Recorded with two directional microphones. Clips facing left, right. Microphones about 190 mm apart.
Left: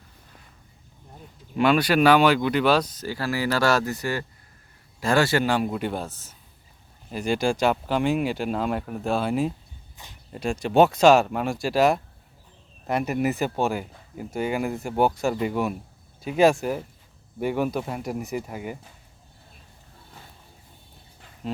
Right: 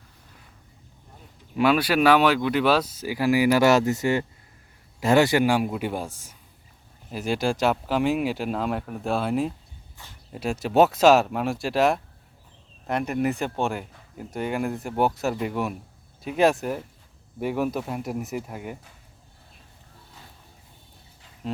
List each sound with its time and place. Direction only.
1.5 s a man's voice: 5° right (ahead or behind)
10.0 s speech: 20° left (ahead or behind)
10.3 s speech: 5° right (ahead or behind)
21.4 s dog: centre (ahead or behind)